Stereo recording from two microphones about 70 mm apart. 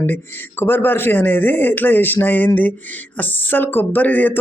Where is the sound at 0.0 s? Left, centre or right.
Left.